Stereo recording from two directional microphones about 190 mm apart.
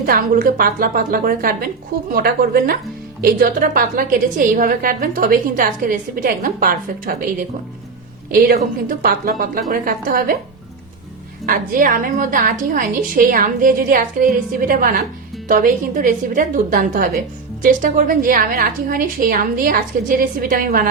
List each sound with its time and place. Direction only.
0.0 s a woman's voice: 50° right (ahead or behind)
8.3 s a woman's voice: 50° right (ahead or behind)
11.4 s a woman's voice: 50° right (ahead or behind)